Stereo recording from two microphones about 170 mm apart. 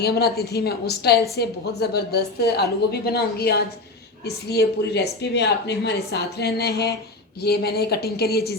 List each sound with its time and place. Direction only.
0.0 s speech: 70° left (ahead or behind)